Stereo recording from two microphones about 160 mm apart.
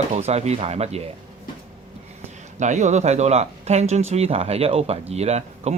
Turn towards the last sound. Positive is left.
turn(degrees=-45)  # may be behind; listen again after turning